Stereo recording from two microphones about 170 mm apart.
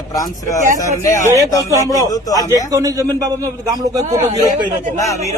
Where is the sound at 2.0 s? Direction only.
20° left (ahead or behind).